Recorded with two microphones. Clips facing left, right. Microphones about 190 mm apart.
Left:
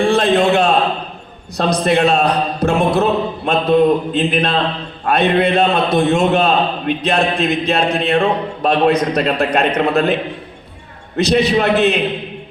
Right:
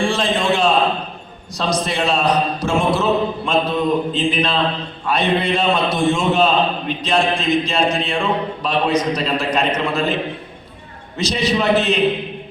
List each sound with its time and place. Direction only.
0.1 s a sound: 60° left (ahead or behind)
1.5 s a man's voice: 60° left (ahead or behind)
11.2 s a man's voice: 60° left (ahead or behind)